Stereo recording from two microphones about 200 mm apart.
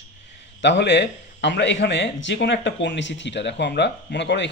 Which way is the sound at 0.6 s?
60° left (ahead or behind).